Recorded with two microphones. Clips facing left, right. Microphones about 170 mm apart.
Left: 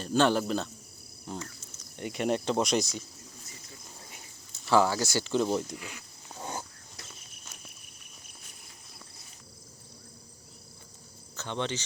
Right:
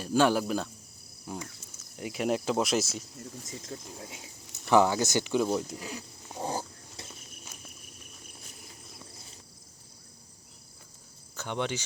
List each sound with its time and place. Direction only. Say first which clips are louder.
0.0 s speech: even; 10° right (ahead or behind)
3.7 s speech: right 13 dB; 60° right (ahead or behind)
4.7 s speech: right 2 dB; 20° right (ahead or behind)
5.5 s speech: even; centre (ahead or behind)
5.7 s speech: right 3 dB; 35° right (ahead or behind)
6.4 s pig: right 5 dB; 30° right (ahead or behind)
11.3 s speech: right 1 dB; 10° right (ahead or behind)